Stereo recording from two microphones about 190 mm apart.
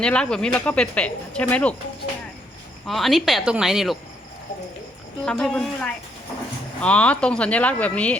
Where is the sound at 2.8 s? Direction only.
Centre (ahead or behind).